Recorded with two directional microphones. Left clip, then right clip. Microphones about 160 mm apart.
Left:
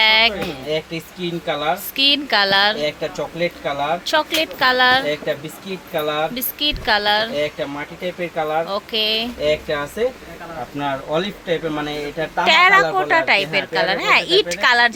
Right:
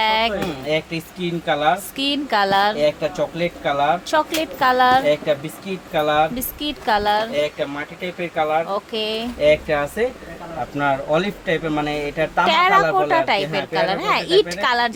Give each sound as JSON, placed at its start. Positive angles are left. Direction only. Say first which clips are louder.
{"t": 0.0, "sound": "speech", "louder": "left 4 dB", "side_deg": -15}
{"t": 12.5, "sound": "speech", "louder": "left 4 dB", "side_deg": -10}